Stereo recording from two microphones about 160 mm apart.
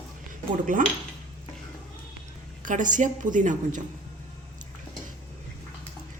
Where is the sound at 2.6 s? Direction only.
55° right (ahead or behind).